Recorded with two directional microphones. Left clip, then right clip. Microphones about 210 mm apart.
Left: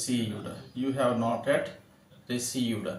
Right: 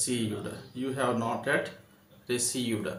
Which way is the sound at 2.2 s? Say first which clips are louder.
Right 1 dB; 50° right (ahead or behind).